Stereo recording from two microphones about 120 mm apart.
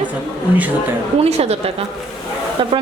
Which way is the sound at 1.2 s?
60° right (ahead or behind).